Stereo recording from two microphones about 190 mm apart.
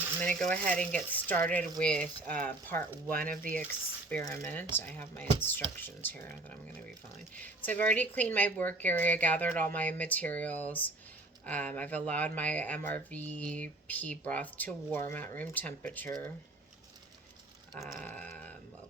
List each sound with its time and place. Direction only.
0.2 s a woman's voice: 5° left (ahead or behind)
3.1 s speech: 45° right (ahead or behind)
3.7 s a woman's voice: 10° left (ahead or behind)
18.0 s a woman's voice: 10° left (ahead or behind)